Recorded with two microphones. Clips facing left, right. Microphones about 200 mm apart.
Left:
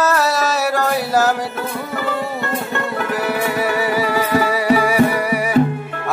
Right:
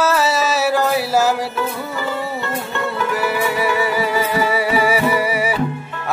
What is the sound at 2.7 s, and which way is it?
Music, 55° left (ahead or behind).